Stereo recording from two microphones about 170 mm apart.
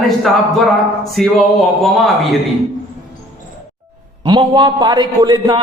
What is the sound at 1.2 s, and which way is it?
Speech, centre (ahead or behind).